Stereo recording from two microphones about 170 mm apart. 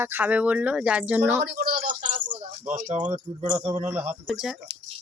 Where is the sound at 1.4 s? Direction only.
65° right (ahead or behind); by 2.4 s 45° right (ahead or behind).